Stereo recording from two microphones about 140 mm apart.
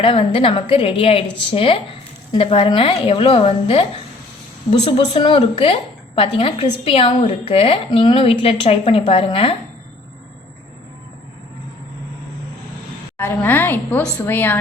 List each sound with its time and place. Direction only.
0.0 s a woman's voice: 40° left (ahead or behind)
13.1 s a woman's voice: 15° left (ahead or behind)